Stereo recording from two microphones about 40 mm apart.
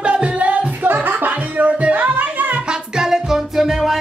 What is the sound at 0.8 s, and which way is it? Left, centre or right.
Music, right.